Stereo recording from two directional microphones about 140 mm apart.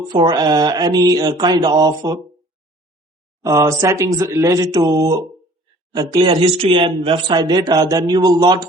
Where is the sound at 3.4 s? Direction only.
25° right (ahead or behind).